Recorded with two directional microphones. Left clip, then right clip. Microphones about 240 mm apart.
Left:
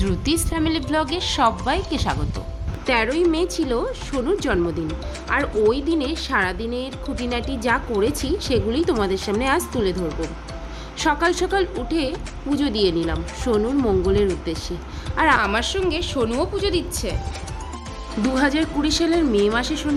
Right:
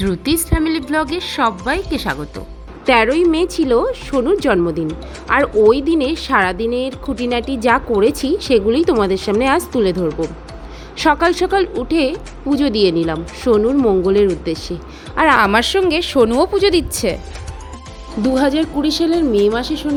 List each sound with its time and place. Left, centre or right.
0.0 s a woman's voice: centre
10.1 s speech: centre
10.9 s a woman's voice: centre
15.4 s a woman's voice: right
18.2 s a woman's voice: centre